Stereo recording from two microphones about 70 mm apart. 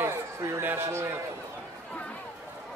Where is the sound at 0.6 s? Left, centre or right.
Right.